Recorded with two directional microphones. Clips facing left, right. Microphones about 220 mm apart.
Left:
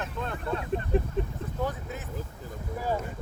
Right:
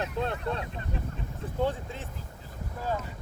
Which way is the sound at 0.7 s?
50° left (ahead or behind).